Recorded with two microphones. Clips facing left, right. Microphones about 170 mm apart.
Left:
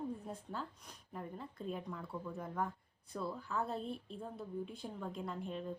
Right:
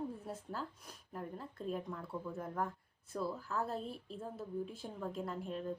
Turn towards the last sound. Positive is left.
turn(degrees=0)  # may be behind; listen again after turning